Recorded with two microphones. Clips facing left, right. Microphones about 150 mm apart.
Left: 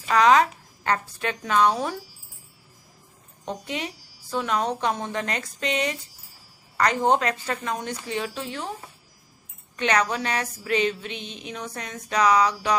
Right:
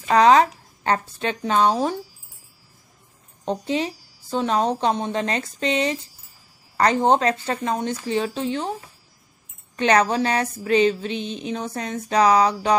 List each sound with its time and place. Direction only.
0.1 s a woman's voice: 30° right (ahead or behind)
3.4 s a woman's voice: 30° right (ahead or behind)
9.8 s a sound: 30° right (ahead or behind)